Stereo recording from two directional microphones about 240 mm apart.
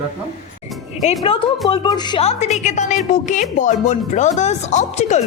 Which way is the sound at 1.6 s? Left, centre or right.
Left.